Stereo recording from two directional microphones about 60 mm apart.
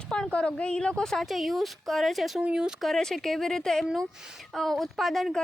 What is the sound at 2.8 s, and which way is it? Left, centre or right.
A woman's voice, centre.